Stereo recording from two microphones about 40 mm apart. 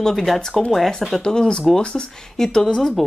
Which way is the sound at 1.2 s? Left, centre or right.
Centre.